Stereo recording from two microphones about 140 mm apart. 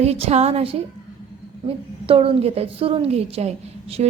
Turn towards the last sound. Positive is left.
turn(degrees=-50)  # may be behind; listen again after turning